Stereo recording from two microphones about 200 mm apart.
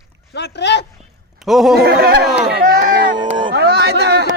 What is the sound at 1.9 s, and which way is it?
Speech, 50° right (ahead or behind).